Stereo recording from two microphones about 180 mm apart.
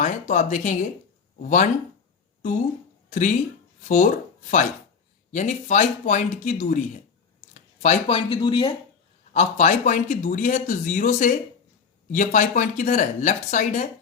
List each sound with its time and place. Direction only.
0.0 s speech: 40° left (ahead or behind)
3.1 s speech: 45° left (ahead or behind)
5.3 s speech: 40° left (ahead or behind); by 8.7 s 25° left (ahead or behind)
9.3 s a man's voice: 40° left (ahead or behind)